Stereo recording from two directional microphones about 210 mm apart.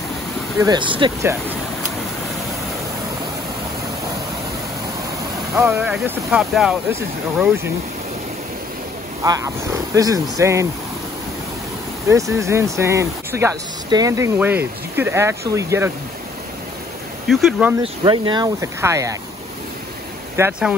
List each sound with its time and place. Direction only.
0.6 s speech: 20° right (ahead or behind)
5.5 s speech: 10° right (ahead or behind)
9.2 s speech: 15° right (ahead or behind)
12.1 s speech: 15° right (ahead or behind)
17.3 s speech: centre (ahead or behind)
17.8 s speech: 25° right (ahead or behind)
20.3 s speech: 10° right (ahead or behind)